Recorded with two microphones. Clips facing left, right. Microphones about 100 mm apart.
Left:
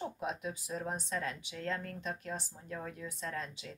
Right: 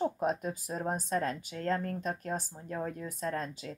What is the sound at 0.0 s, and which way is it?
Speech, 45° right (ahead or behind).